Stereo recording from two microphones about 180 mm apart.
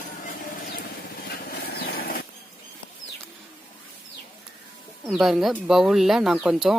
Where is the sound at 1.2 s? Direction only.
60° left (ahead or behind).